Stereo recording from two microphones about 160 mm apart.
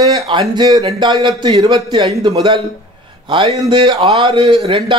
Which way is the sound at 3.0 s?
30° right (ahead or behind).